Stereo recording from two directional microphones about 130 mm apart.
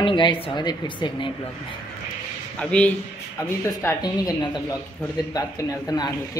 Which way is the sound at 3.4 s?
25° left (ahead or behind).